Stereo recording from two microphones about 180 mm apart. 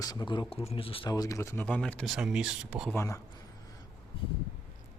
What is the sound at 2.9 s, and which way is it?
Speech, 15° left (ahead or behind).